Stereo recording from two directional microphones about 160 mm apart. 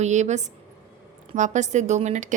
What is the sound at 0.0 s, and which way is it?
A woman's voice, 45° right (ahead or behind).